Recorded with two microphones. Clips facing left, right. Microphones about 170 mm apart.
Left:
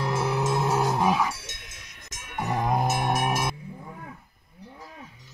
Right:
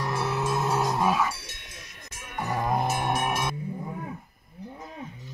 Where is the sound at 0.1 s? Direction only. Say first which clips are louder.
Left 2 dB; 15° left (ahead or behind).